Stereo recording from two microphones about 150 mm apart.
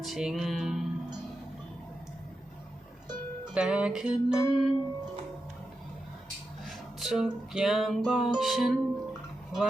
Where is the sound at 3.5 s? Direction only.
5° right (ahead or behind).